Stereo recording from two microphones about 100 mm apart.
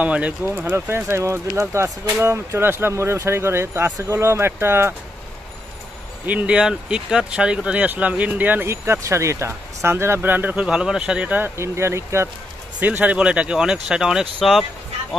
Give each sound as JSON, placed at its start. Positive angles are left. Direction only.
{"t": 0.0, "sound": "speech", "side_deg": -15}
{"t": 6.2, "sound": "speech", "side_deg": -15}
{"t": 12.8, "sound": "speech", "side_deg": -15}